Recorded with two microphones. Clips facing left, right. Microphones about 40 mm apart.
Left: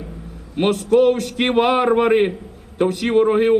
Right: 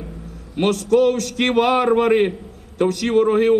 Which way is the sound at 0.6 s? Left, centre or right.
Centre.